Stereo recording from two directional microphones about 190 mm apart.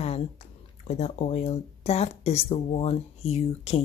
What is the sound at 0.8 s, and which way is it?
Speech, 35° left (ahead or behind).